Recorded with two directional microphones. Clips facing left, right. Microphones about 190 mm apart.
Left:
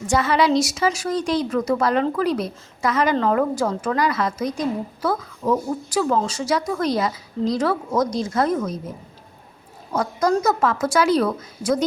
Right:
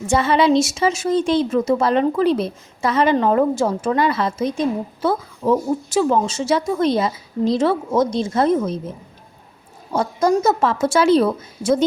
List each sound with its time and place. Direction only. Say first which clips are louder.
0.1 s a woman's voice: right 3 dB; 25° right (ahead or behind)
9.9 s a woman's voice: right 3 dB; 25° right (ahead or behind)